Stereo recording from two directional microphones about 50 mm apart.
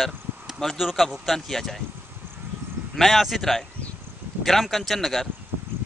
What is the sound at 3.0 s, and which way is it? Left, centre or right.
Speech, centre.